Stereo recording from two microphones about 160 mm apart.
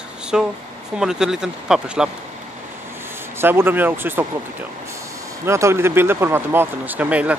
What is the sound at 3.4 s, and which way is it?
Speech, 15° right (ahead or behind).